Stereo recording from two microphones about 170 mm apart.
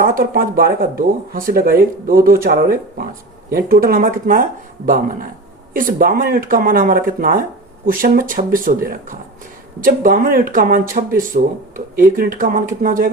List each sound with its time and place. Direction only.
0.0 s speech: 55° right (ahead or behind)